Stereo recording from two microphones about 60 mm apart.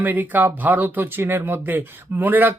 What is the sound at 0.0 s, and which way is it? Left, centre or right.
Speech, right.